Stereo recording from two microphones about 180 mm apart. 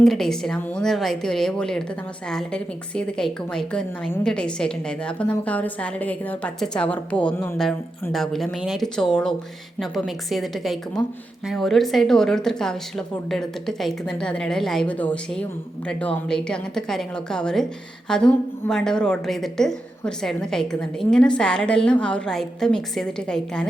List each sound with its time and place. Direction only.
0.0 s a woman's voice: centre (ahead or behind)